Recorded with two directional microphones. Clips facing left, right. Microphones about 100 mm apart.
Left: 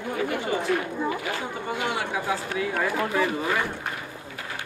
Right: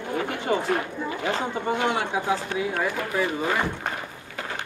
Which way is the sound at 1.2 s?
25° right (ahead or behind).